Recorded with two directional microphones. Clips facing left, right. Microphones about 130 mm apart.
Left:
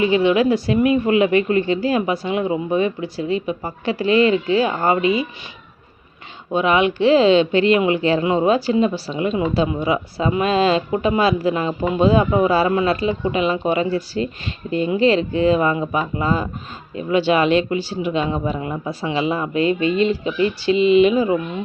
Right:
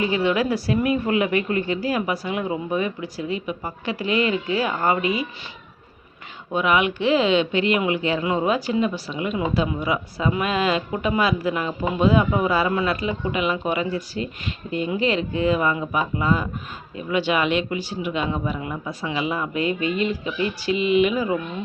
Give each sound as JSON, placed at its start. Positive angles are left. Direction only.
{"t": 0.0, "sound": "speech", "side_deg": 20}
{"t": 6.5, "sound": "speech", "side_deg": 30}